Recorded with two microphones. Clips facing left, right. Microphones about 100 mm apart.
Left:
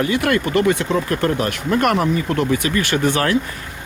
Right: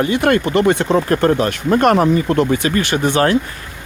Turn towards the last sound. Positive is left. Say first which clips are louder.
# right 3 dB
turn(degrees=-25)  # may be behind; listen again after turning